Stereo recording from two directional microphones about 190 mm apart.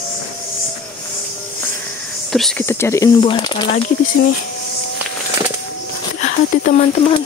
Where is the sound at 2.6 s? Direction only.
15° left (ahead or behind).